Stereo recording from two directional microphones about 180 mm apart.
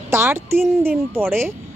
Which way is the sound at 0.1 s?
15° right (ahead or behind).